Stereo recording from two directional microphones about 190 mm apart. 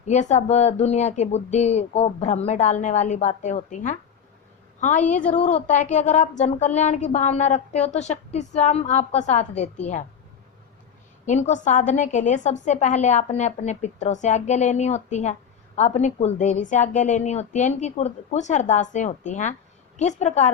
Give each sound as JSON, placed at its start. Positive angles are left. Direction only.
{"t": 0.0, "sound": "a woman's voice", "side_deg": 40}
{"t": 11.3, "sound": "a woman's voice", "side_deg": 40}